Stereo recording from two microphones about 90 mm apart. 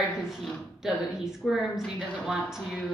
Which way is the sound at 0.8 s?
5° right (ahead or behind).